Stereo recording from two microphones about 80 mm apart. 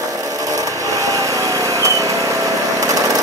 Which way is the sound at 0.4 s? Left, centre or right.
Right.